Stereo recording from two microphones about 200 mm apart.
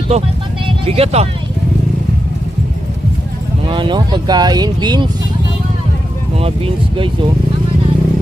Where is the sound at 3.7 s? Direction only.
25° right (ahead or behind).